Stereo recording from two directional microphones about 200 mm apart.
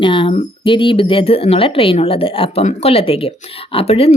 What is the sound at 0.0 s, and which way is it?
Speech, 25° left (ahead or behind).